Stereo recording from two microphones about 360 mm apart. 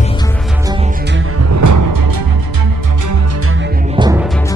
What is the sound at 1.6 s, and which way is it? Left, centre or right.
Music, right.